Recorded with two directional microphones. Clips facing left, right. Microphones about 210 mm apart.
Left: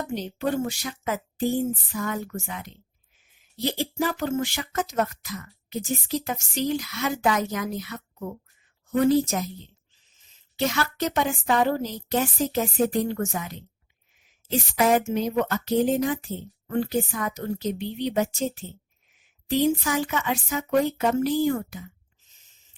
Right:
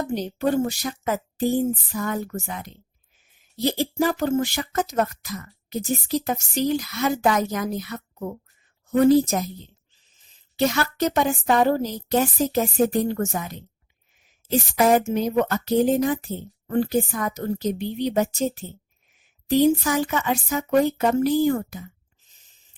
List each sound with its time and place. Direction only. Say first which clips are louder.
0.1 s speech: right 4 dB; 40° right (ahead or behind)
10.7 s speech: right 3 dB; 40° right (ahead or behind)
14.8 s speech: right 2 dB; 40° right (ahead or behind)